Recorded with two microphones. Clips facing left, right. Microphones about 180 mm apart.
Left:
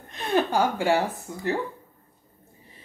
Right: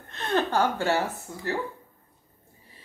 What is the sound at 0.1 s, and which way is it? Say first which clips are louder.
Speech: left 2 dB; 10° left (ahead or behind).